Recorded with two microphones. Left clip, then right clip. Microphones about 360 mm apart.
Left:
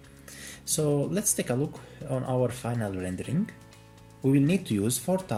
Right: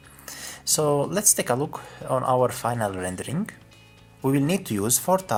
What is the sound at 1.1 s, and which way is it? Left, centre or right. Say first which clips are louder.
Speech: right 6 dB; centre.